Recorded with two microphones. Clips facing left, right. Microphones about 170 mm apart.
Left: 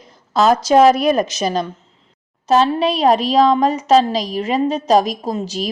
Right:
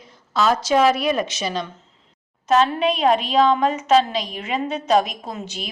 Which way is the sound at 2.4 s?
35° left (ahead or behind).